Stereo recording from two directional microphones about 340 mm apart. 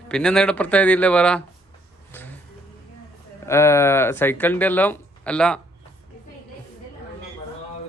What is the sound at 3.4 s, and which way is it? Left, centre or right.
Speech, centre.